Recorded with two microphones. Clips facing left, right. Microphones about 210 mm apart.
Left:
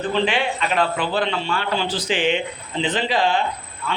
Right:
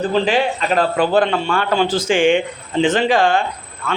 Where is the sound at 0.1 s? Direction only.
40° right (ahead or behind).